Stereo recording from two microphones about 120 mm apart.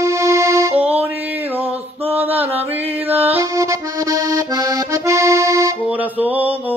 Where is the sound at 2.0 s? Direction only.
15° right (ahead or behind).